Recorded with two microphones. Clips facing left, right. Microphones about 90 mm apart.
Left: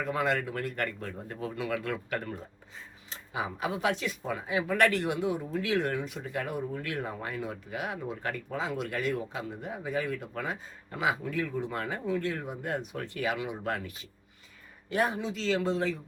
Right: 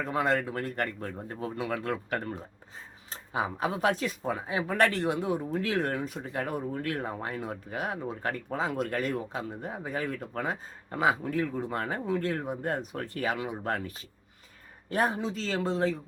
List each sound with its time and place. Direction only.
0.0 s speech: 30° right (ahead or behind)